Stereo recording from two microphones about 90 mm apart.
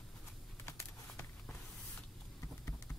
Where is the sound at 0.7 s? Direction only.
30° left (ahead or behind).